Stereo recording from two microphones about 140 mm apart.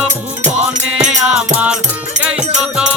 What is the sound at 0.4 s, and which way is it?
Music, 55° right (ahead or behind).